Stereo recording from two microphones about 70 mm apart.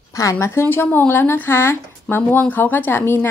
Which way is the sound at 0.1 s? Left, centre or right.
Left.